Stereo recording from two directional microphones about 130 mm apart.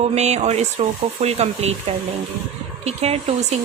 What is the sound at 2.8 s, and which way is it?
Speech, 55° right (ahead or behind).